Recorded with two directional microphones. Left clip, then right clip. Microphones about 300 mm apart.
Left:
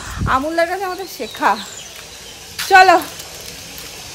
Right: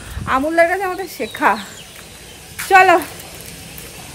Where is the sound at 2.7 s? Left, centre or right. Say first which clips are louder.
Left 1 dB; centre.